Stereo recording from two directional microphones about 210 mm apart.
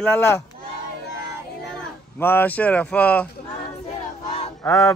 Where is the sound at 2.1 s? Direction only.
10° left (ahead or behind).